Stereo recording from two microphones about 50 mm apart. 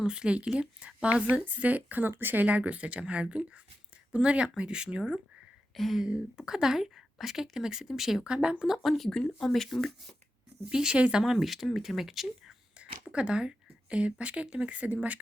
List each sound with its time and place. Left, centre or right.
0.0 s a woman's voice: centre
5.7 s speech: centre
6.1 s speech: centre
8.2 s speech: centre
8.6 s speech: centre
10.7 s speech: centre
11.2 s speech: centre
12.7 s a sound: right
13.9 s speech: right